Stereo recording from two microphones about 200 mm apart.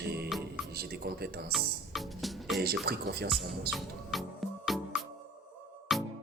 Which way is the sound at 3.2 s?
Centre (ahead or behind).